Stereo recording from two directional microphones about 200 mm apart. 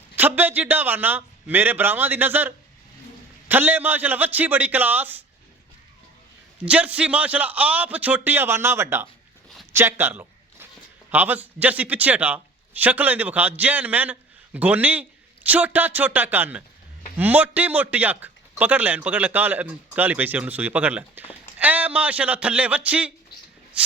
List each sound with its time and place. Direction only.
0.2 s a man's voice: 10° right (ahead or behind)
3.5 s a man's voice: 10° right (ahead or behind)
6.7 s a man's voice: 5° right (ahead or behind)
9.7 s a sound: 10° right (ahead or behind)
11.1 s a man's voice: 10° right (ahead or behind)
23.8 s shuffle: 5° right (ahead or behind)